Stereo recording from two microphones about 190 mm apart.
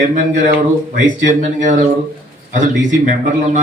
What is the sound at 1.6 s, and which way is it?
Speech, 40° right (ahead or behind).